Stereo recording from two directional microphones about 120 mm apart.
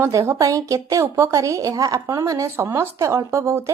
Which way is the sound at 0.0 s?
25° right (ahead or behind).